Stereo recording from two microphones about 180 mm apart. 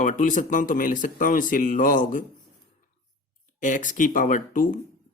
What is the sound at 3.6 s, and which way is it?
Speech, 45° left (ahead or behind).